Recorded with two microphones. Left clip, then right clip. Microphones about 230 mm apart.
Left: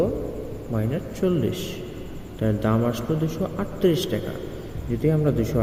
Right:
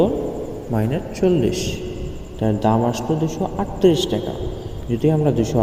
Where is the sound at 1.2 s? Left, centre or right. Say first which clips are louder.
Right 6 dB; centre.